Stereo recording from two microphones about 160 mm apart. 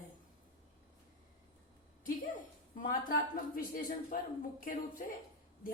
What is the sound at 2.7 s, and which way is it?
Speech, 60° left (ahead or behind).